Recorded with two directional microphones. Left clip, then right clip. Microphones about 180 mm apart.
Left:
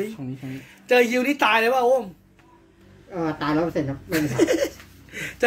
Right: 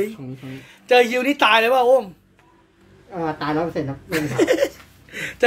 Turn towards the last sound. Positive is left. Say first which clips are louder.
# right 3 dB
turn(degrees=-30)  # may be behind; listen again after turning